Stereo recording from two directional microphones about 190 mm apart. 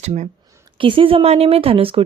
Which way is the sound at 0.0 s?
35° right (ahead or behind).